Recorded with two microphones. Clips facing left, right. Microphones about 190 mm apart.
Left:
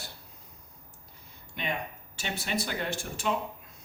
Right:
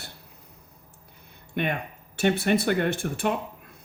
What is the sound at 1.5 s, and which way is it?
Speech, 60° right (ahead or behind).